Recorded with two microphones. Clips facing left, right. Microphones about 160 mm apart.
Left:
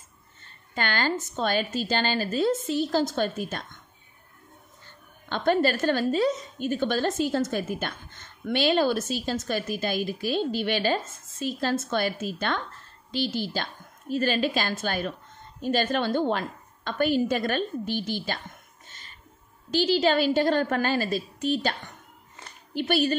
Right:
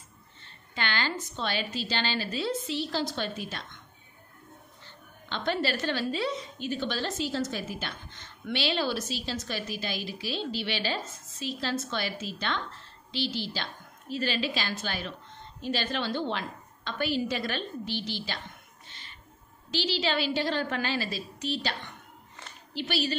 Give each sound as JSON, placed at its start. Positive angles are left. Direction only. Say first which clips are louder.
{"t": 0.4, "sound": "a woman's voice", "louder": "left 4 dB", "side_deg": 45}
{"t": 4.8, "sound": "a woman's voice", "louder": "left 4 dB", "side_deg": 50}
{"t": 18.9, "sound": "a sound", "louder": "even", "side_deg": 45}
{"t": 19.7, "sound": "a woman's voice", "louder": "left 7 dB", "side_deg": 50}